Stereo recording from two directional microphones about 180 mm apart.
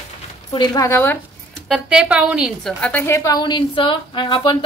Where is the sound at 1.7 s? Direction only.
5° right (ahead or behind).